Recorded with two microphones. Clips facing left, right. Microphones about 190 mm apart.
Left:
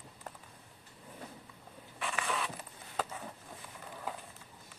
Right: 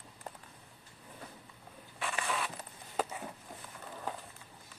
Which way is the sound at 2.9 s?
10° right (ahead or behind).